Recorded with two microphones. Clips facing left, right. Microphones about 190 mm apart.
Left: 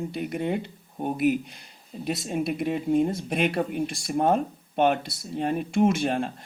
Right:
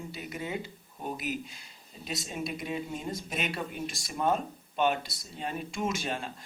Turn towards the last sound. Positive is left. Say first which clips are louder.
# left 10 dB
turn(degrees=55)  # may be behind; listen again after turning